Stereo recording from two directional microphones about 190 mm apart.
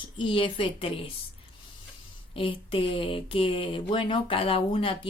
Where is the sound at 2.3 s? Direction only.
30° left (ahead or behind).